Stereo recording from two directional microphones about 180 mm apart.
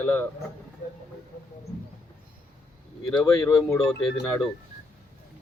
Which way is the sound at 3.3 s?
15° left (ahead or behind).